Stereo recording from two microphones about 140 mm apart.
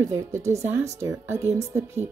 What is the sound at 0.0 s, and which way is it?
Speech, 20° right (ahead or behind).